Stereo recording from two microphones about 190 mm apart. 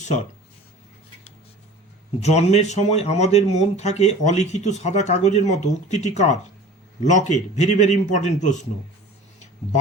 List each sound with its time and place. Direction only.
2.2 s speech: 35° left (ahead or behind)